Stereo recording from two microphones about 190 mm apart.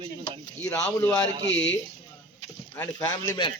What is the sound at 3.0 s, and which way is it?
Speech, 20° left (ahead or behind).